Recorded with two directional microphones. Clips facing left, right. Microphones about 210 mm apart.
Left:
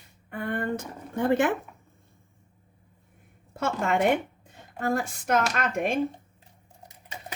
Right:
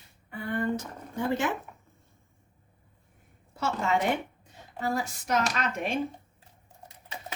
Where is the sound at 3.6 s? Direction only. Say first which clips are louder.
Left 3 dB; 55° left (ahead or behind).